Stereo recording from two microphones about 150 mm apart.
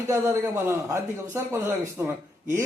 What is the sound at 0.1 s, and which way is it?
Speech, 15° right (ahead or behind).